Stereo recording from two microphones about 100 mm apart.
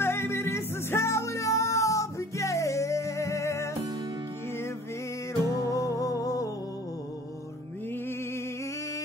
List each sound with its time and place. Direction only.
0.0 s music: 25° left (ahead or behind)
5.7 s music: 35° left (ahead or behind)